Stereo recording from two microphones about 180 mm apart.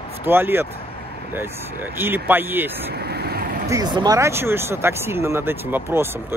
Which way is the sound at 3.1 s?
65° right (ahead or behind).